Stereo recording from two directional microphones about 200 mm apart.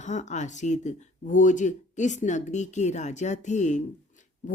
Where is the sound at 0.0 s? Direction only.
35° left (ahead or behind).